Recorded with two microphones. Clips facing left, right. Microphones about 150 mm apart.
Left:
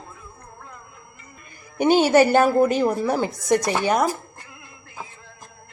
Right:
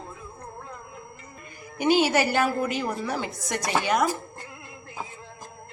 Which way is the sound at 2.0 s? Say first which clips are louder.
Left 7 dB; 45° left (ahead or behind).